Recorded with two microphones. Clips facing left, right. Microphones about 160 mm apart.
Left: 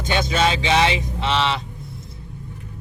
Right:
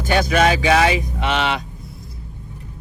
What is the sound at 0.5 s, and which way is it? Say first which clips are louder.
Speech: right 3 dB; 25° left (ahead or behind).